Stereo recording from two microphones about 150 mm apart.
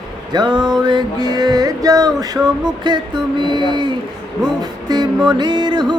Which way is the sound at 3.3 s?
30° right (ahead or behind).